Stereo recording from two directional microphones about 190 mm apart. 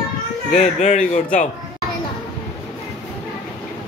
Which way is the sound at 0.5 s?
35° left (ahead or behind).